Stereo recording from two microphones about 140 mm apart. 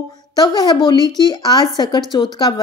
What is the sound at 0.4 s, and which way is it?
Speech, 30° left (ahead or behind).